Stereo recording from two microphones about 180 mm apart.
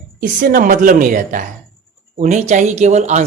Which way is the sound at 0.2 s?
50° right (ahead or behind).